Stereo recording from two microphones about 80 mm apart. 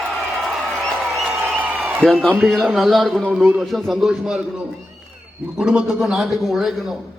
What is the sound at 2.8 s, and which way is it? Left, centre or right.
A man's voice, centre.